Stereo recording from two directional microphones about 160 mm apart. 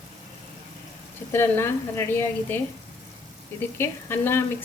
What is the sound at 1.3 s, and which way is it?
A woman's voice, 15° left (ahead or behind).